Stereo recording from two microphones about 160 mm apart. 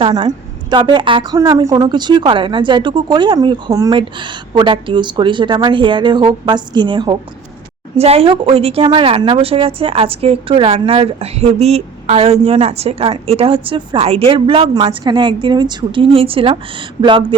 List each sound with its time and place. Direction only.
0.0 s a woman's voice: 30° right (ahead or behind)